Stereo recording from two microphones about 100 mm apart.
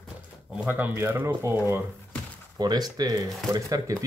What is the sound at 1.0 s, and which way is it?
Speech, 20° right (ahead or behind).